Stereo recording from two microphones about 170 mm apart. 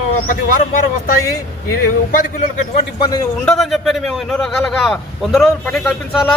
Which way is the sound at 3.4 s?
5° left (ahead or behind).